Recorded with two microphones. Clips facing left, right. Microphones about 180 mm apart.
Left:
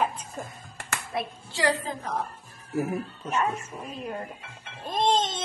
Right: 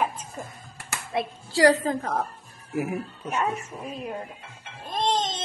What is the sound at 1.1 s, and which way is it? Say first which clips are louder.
A child's voice: right 6 dB; 40° right (ahead or behind).